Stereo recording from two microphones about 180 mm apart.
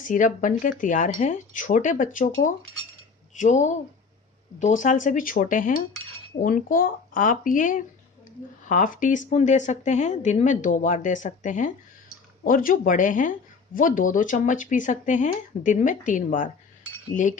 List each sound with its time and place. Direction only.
0.0 s speech: 45° left (ahead or behind)